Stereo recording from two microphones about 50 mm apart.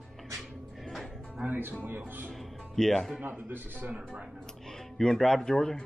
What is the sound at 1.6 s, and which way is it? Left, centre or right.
Speech, right.